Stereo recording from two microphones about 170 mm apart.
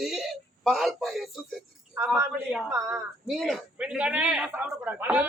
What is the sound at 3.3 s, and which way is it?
A man's voice, centre (ahead or behind).